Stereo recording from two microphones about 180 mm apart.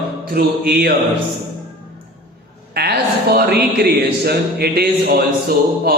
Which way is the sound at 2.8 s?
60° right (ahead or behind).